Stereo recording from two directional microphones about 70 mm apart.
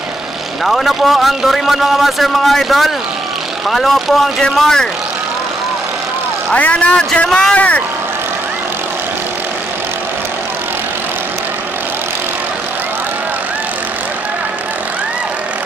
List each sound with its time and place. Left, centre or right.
0.7 s a man's voice: centre
6.5 s speech: centre
7.2 s speech: centre
7.5 s speech: left